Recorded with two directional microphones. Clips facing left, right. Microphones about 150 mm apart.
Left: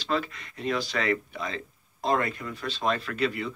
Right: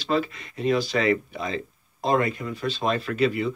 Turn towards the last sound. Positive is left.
turn(degrees=-15)  # may be behind; listen again after turning